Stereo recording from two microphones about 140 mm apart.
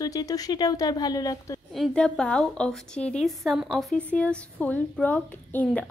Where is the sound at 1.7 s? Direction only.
5° left (ahead or behind).